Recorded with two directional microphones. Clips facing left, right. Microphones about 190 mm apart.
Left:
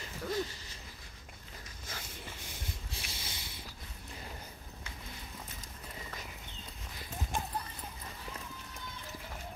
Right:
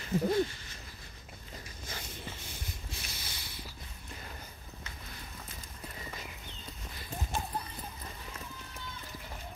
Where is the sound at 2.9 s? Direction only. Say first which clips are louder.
Even; 25° left (ahead or behind).